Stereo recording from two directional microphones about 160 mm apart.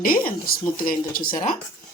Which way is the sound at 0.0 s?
65° left (ahead or behind).